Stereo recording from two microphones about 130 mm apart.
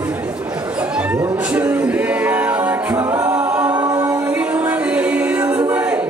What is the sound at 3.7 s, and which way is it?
A capella, 30° right (ahead or behind).